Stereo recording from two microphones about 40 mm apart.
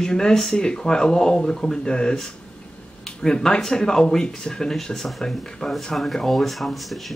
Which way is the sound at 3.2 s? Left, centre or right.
Centre.